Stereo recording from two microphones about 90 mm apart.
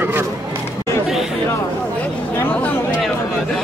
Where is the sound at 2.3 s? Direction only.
20° left (ahead or behind).